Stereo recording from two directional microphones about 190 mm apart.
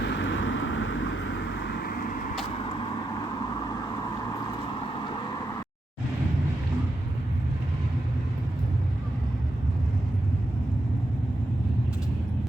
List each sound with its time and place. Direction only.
0.0 s vehicle: 70° left (ahead or behind); by 2.3 s 45° left (ahead or behind)
3.3 s vehicle: 20° left (ahead or behind)
4.8 s vehicle: 25° left (ahead or behind)